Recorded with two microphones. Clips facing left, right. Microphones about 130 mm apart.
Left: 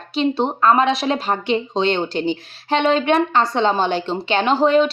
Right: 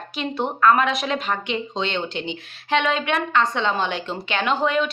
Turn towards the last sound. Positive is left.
turn(degrees=35)  # may be behind; listen again after turning